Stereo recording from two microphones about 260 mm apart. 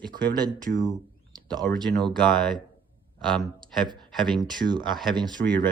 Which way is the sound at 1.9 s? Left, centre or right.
Centre.